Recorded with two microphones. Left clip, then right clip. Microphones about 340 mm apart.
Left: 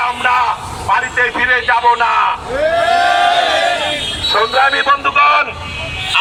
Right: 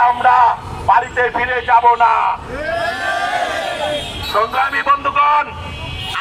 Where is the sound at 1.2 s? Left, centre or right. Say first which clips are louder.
Left 3 dB; centre.